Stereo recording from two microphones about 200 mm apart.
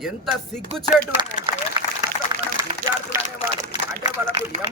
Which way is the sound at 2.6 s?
15° right (ahead or behind).